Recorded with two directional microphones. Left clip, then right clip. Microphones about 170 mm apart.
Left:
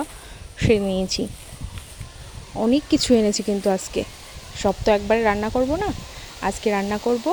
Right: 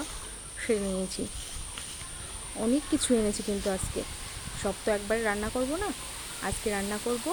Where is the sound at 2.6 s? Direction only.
40° left (ahead or behind).